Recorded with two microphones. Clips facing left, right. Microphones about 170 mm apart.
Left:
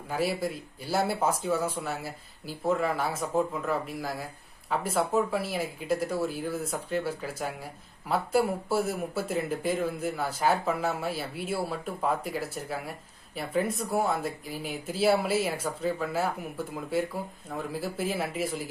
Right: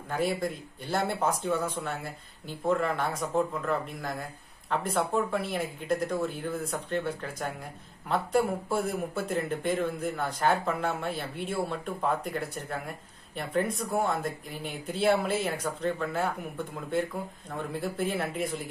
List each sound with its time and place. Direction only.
0.1 s speech: 5° left (ahead or behind)